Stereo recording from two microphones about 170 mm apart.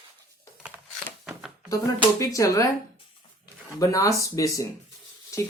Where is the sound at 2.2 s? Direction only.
20° left (ahead or behind).